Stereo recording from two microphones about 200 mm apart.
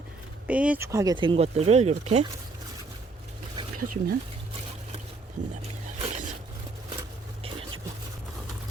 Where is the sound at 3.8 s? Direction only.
45° right (ahead or behind).